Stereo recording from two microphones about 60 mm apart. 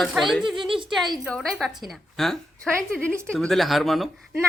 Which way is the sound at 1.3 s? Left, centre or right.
Centre.